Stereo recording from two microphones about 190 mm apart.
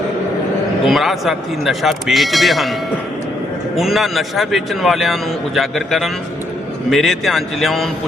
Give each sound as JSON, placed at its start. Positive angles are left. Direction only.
{"t": 0.9, "sound": "a man's voice", "side_deg": 0}
{"t": 3.8, "sound": "a man's voice", "side_deg": 0}